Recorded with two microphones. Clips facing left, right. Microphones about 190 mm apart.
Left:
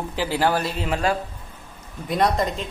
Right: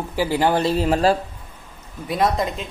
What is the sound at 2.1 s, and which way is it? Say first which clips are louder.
Speech: even; centre (ahead or behind).